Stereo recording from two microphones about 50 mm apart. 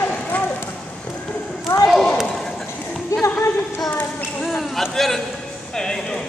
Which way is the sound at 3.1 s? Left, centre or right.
Left.